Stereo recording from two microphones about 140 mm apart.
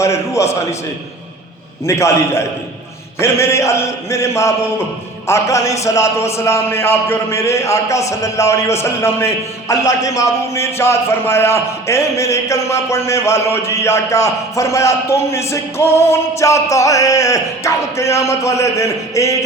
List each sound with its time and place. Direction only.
0.0 s a man's voice: 20° left (ahead or behind)
1.8 s a man's voice: 20° left (ahead or behind)